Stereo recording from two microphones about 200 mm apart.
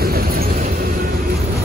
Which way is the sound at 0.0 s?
50° right (ahead or behind).